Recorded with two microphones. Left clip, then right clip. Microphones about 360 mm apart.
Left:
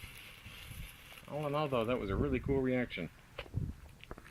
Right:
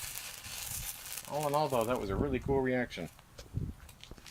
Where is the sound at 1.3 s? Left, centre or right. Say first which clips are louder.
Right 4 dB; right.